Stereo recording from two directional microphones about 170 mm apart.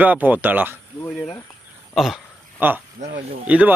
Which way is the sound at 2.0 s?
Centre (ahead or behind).